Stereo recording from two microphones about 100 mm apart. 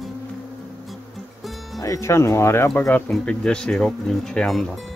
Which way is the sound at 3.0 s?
5° left (ahead or behind).